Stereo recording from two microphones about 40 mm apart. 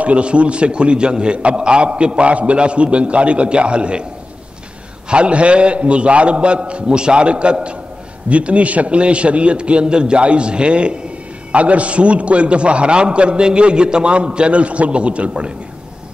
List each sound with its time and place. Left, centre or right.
0.0 s a man's voice: right
5.1 s a man's voice: right